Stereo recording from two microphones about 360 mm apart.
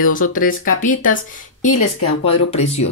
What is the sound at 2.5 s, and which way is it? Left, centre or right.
Speech, centre.